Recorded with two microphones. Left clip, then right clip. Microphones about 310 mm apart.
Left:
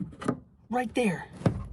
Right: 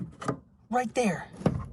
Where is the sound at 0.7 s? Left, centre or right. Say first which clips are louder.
Right 1 dB; centre.